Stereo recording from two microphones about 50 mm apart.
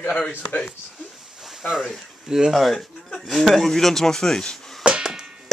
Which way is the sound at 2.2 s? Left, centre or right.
Centre.